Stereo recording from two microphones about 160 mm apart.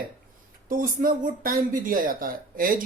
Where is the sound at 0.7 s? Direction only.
60° right (ahead or behind).